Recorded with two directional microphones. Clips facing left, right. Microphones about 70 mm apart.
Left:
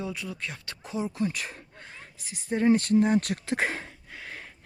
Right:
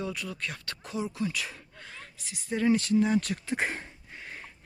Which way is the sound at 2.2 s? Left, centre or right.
Left.